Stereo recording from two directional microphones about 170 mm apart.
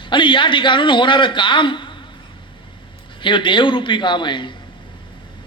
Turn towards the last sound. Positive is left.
turn(degrees=30)  # may be behind; listen again after turning